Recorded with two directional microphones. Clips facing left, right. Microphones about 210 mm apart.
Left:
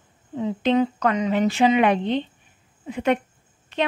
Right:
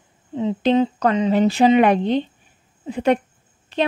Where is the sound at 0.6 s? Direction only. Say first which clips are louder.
Right 2 dB; 30° right (ahead or behind).